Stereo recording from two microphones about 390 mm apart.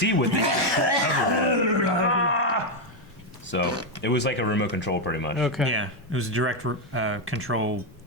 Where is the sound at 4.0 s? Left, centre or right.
Left.